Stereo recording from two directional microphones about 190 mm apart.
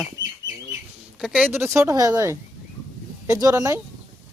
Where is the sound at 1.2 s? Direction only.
5° right (ahead or behind).